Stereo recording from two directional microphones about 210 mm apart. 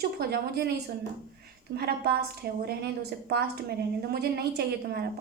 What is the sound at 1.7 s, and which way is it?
A woman's voice, 50° right (ahead or behind).